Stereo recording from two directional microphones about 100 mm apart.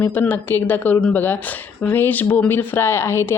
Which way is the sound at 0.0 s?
20° left (ahead or behind).